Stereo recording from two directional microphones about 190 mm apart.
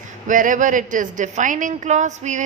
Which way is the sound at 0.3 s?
45° right (ahead or behind).